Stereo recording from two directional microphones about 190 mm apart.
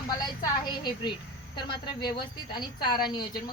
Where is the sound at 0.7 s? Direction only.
25° left (ahead or behind).